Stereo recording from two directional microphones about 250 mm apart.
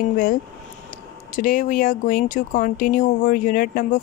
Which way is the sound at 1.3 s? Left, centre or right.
Left.